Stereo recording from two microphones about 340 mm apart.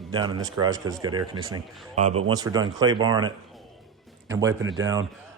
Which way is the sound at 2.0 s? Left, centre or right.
Centre.